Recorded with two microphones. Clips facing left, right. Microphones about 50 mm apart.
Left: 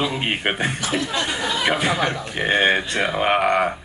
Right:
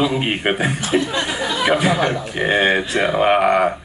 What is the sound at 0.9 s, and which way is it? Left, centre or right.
Speech, centre.